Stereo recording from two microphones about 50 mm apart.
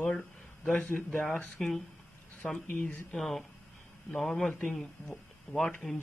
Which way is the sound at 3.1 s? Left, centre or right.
Centre.